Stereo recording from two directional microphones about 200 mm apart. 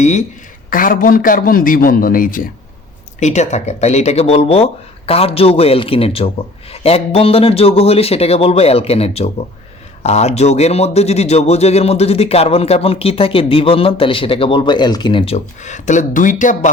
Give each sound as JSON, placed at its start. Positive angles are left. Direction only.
{"t": 0.0, "sound": "a man's voice", "side_deg": 35}